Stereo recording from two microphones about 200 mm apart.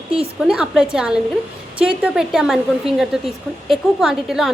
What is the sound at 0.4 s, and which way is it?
A woman's voice, 5° right (ahead or behind).